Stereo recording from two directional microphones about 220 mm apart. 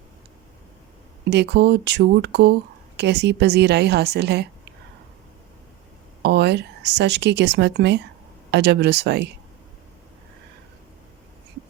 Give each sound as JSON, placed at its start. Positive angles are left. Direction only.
{"t": 1.3, "sound": "speech", "side_deg": -50}
{"t": 6.2, "sound": "speech", "side_deg": -50}